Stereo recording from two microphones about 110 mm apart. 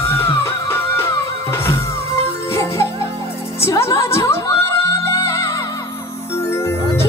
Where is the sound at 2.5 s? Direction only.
25° left (ahead or behind).